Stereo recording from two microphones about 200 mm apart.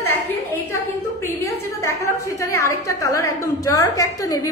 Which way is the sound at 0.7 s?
15° left (ahead or behind).